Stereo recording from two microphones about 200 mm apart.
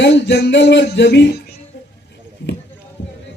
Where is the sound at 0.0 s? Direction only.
60° left (ahead or behind).